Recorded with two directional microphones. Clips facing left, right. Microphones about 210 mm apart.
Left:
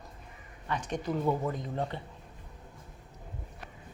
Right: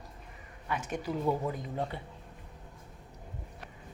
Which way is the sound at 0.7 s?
5° right (ahead or behind).